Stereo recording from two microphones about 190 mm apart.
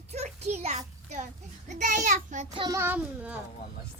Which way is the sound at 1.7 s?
40° right (ahead or behind).